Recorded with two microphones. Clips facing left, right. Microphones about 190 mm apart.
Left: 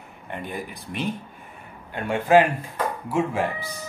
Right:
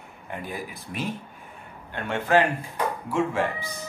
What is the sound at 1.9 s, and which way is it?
Speech, 10° left (ahead or behind).